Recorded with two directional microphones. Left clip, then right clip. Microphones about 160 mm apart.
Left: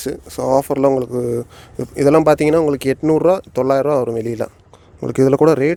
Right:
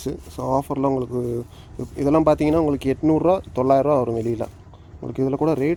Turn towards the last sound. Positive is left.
turn(degrees=90)